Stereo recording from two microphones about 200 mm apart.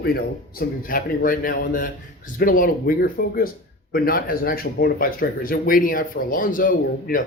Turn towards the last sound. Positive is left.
turn(degrees=45)  # may be behind; listen again after turning